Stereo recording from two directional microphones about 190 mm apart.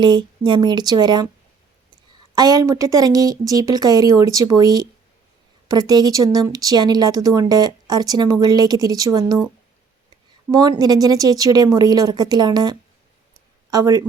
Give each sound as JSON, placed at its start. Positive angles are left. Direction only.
{"t": 0.0, "sound": "speech", "side_deg": -25}
{"t": 2.3, "sound": "speech", "side_deg": -20}
{"t": 10.5, "sound": "speech", "side_deg": -20}